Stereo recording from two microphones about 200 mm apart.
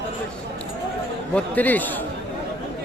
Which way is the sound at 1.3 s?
10° left (ahead or behind).